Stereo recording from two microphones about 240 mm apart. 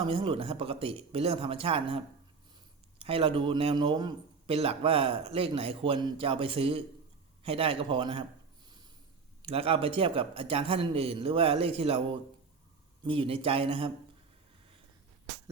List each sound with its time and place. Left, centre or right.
0.0 s a man's voice: right
9.4 s a man's voice: right